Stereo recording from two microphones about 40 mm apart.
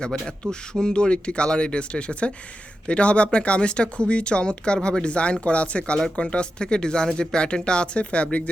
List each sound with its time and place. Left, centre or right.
0.0 s speech: centre